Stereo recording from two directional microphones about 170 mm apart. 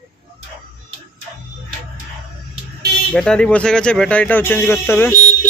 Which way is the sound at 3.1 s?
5° left (ahead or behind).